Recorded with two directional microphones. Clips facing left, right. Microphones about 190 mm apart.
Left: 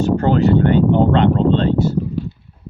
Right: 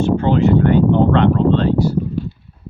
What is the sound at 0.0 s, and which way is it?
Speech, 40° left (ahead or behind).